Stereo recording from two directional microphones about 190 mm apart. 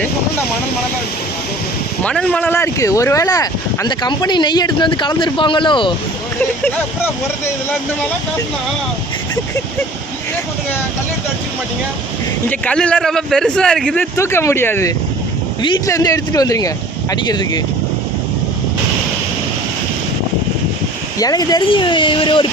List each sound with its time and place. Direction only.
2.0 s speech: 5° left (ahead or behind); by 5.9 s 25° left (ahead or behind)
6.7 s a man's voice: 10° left (ahead or behind)
12.5 s a man's voice: 5° left (ahead or behind); by 17.6 s 20° left (ahead or behind)
21.2 s speech: 20° left (ahead or behind)